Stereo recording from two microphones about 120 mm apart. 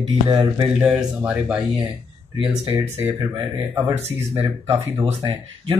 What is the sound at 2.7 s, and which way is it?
Speech, 20° right (ahead or behind).